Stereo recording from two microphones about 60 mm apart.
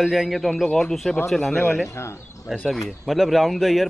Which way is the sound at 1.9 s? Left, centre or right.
Left.